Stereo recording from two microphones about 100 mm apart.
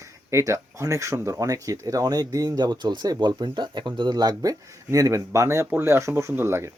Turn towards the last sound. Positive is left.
turn(degrees=-25)  # may be behind; listen again after turning